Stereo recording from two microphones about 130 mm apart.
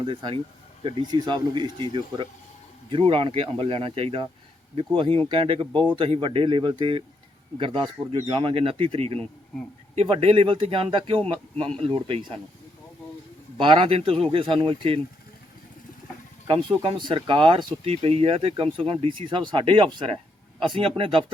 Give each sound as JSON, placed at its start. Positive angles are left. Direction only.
{"t": 0.0, "sound": "speech", "side_deg": -40}
{"t": 13.6, "sound": "speech", "side_deg": -40}
{"t": 16.5, "sound": "speech", "side_deg": -40}